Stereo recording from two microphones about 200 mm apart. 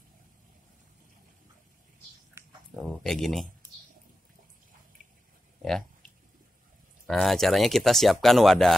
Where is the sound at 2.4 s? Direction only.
10° right (ahead or behind).